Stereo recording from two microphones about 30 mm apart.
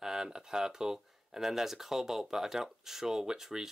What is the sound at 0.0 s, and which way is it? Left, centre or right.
Speech, right.